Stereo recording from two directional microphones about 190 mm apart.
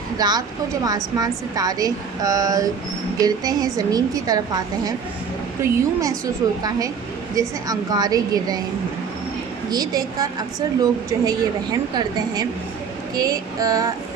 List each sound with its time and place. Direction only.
0.2 s a woman's voice: 20° right (ahead or behind)
9.6 s a woman's voice: 20° right (ahead or behind)
11.3 s a woman's voice: 20° right (ahead or behind)